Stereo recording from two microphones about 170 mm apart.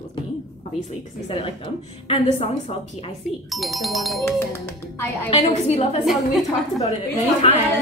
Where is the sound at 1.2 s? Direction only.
35° left (ahead or behind).